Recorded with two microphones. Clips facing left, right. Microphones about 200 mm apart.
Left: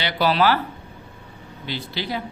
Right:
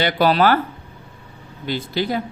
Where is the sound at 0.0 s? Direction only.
50° right (ahead or behind).